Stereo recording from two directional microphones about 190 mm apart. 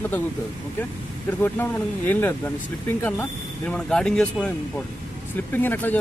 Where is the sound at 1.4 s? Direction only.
10° left (ahead or behind).